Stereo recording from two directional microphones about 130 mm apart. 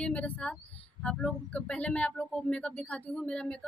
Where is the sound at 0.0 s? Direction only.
10° left (ahead or behind).